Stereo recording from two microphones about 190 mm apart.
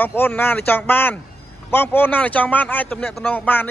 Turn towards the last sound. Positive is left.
turn(degrees=10)  # may be behind; listen again after turning